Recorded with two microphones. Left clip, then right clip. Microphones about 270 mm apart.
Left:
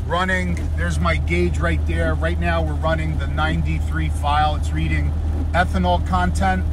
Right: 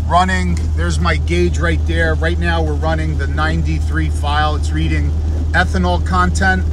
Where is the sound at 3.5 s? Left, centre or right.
Right.